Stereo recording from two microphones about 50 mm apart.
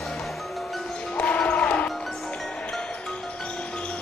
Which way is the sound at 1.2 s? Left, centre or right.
Left.